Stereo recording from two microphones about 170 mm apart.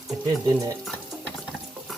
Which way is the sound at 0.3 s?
20° right (ahead or behind).